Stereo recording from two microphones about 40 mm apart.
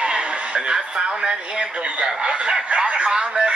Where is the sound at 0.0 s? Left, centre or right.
Right.